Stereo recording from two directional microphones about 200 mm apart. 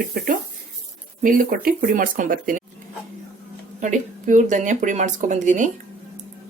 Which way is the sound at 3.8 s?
35° right (ahead or behind).